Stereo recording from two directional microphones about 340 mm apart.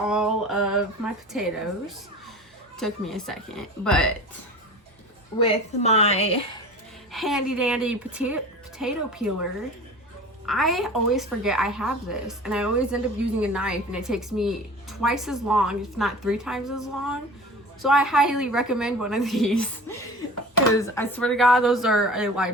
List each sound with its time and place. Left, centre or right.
0.0 s a sound: centre
1.3 s a woman's voice: centre
2.7 s a woman's voice: centre
5.5 s a woman's voice: centre
7.1 s a woman's voice: centre